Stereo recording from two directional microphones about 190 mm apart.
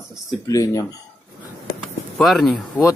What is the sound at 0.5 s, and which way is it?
Speech, 20° left (ahead or behind).